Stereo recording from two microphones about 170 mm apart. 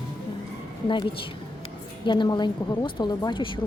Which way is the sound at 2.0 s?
25° left (ahead or behind).